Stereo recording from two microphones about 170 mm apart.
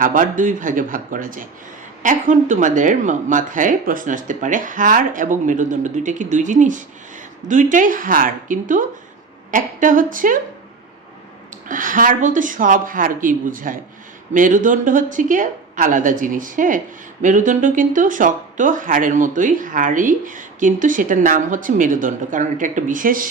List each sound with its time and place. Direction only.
0.0 s speech: 50° right (ahead or behind)
11.7 s speech: 50° right (ahead or behind)